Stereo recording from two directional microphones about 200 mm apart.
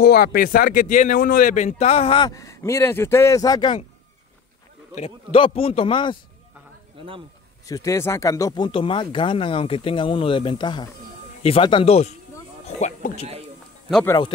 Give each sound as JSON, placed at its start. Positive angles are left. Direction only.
{"t": 0.0, "sound": "speech", "side_deg": 50}
{"t": 4.9, "sound": "speech", "side_deg": 30}
{"t": 7.0, "sound": "speech", "side_deg": -25}
{"t": 7.6, "sound": "speech", "side_deg": 15}
{"t": 14.0, "sound": "speech", "side_deg": 20}